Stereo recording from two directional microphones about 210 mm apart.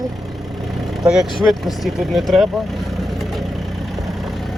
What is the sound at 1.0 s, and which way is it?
Speech, centre (ahead or behind).